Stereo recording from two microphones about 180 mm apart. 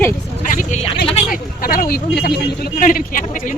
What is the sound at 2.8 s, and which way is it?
Speech, 50° left (ahead or behind).